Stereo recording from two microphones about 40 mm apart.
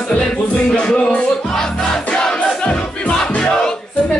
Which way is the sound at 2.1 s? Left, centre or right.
Left.